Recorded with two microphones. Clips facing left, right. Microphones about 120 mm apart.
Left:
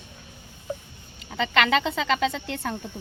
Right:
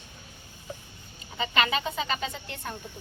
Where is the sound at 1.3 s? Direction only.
90° left.